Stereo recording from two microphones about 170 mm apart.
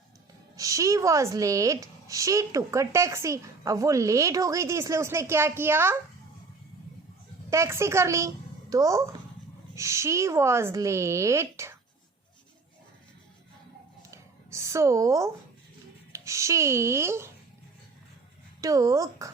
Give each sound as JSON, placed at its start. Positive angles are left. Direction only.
{"t": 0.5, "sound": "a woman's voice", "side_deg": -20}
{"t": 7.5, "sound": "a woman's voice", "side_deg": -15}
{"t": 14.1, "sound": "a sound", "side_deg": -15}
{"t": 16.1, "sound": "a woman's voice", "side_deg": -15}
{"t": 18.6, "sound": "a woman's voice", "side_deg": -20}